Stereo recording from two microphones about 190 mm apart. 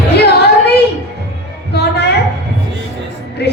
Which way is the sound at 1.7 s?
60° left (ahead or behind).